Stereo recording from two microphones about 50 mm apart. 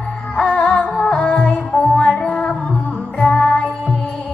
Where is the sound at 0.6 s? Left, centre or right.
Left.